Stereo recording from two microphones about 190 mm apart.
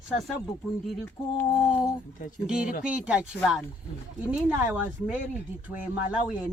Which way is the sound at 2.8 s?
5° right (ahead or behind).